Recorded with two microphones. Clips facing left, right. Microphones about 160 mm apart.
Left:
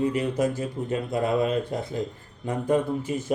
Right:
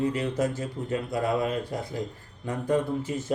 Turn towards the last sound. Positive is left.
turn(degrees=15)  # may be behind; listen again after turning